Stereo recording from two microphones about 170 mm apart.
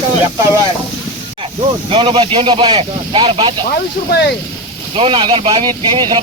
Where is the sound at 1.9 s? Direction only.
30° right (ahead or behind).